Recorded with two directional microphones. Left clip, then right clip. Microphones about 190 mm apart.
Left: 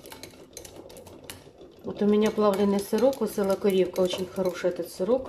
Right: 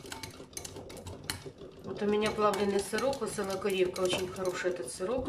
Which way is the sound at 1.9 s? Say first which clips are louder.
Left 6 dB; 30° left (ahead or behind).